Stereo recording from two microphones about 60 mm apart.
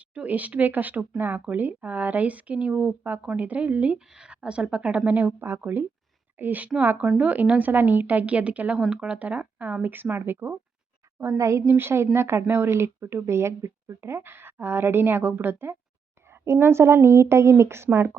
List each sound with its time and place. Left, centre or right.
0.1 s speech: right
3.9 s speech: centre; by 10.6 s right
11.3 s a woman's voice: right
11.7 s a woman's voice: right